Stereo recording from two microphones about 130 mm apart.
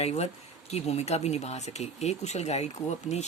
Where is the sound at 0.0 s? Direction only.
55° left (ahead or behind).